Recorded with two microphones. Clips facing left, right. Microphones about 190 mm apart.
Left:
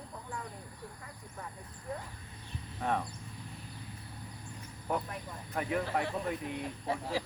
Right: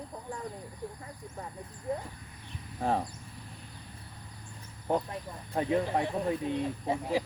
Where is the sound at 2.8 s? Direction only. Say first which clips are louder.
Right 4 dB; 30° right (ahead or behind).